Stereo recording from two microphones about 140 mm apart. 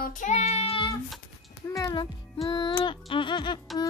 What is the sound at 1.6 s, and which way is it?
Speech, 25° left (ahead or behind).